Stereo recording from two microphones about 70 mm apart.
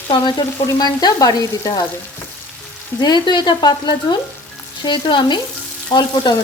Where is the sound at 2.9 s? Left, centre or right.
Left.